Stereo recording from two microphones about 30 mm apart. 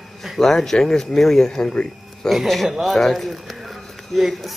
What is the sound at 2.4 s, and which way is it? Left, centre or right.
Speech, centre.